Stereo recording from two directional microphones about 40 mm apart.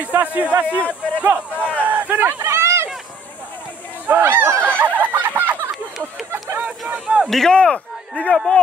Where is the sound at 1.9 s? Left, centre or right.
Right.